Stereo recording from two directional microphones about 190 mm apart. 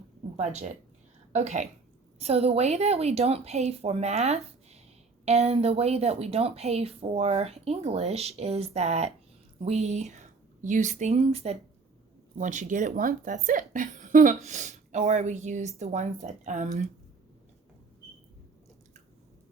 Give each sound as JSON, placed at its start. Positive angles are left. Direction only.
{"t": 0.3, "sound": "a woman's voice", "side_deg": -35}